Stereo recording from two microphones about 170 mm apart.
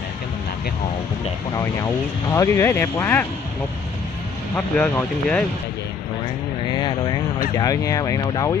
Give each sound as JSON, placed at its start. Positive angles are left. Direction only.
{"t": 2.2, "sound": "speech", "side_deg": 15}
{"t": 4.6, "sound": "speech", "side_deg": 10}
{"t": 6.7, "sound": "speech", "side_deg": 25}